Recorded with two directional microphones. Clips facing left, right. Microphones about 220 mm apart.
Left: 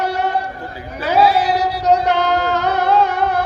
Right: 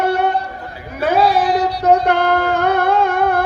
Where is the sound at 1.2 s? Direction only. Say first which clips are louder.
Left 1 dB; 5° left (ahead or behind).